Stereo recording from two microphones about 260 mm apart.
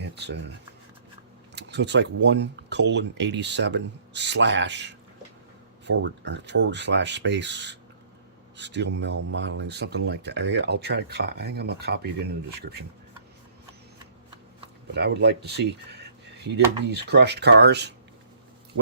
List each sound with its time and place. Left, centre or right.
0.2 s speech: right
1.5 s speech: right
14.9 s speech: right